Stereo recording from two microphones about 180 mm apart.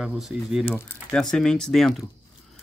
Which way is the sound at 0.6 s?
10° left (ahead or behind).